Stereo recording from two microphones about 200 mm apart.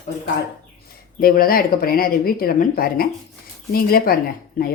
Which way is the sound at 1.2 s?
45° left (ahead or behind).